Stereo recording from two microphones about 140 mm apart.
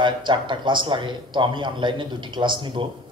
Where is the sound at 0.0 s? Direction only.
35° right (ahead or behind).